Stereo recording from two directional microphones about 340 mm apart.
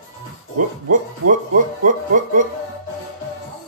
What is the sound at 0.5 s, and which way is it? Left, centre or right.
Speech, right.